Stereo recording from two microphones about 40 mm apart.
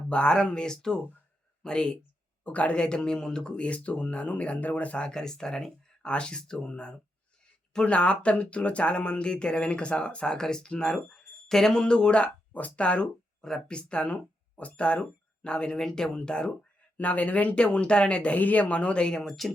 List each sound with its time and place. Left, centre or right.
0.1 s speech: left
2.4 s speech: left; by 3.5 s centre
3.6 s speech: left
5.0 s speech: centre
10.3 s speech: centre
11.1 s speech: centre
12.5 s speech: left
13.4 s speech: centre
13.7 s speech: left
15.8 s speech: centre
17.0 s speech: left
17.5 s speech: left
18.3 s speech: left
19.2 s speech: centre